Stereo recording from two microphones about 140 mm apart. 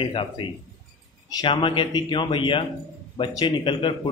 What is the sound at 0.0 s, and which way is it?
Speech, 40° left (ahead or behind).